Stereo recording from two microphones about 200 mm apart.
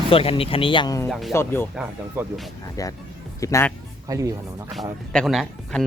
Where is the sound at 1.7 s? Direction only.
5° right (ahead or behind).